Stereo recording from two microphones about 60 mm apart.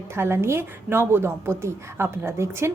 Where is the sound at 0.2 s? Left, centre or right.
Right.